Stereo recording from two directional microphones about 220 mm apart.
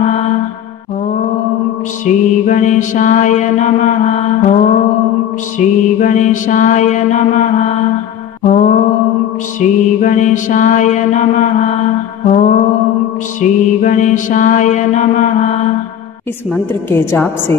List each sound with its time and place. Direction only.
2.0 s mantra: 35° left (ahead or behind)
17.0 s a woman's voice: 10° left (ahead or behind)